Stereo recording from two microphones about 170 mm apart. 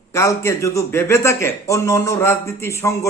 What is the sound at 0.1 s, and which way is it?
A man's voice, 20° left (ahead or behind).